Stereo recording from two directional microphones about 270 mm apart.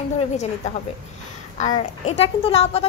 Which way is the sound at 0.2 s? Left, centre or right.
Left.